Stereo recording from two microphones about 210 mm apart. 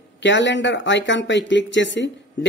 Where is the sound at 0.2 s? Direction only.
60° left (ahead or behind).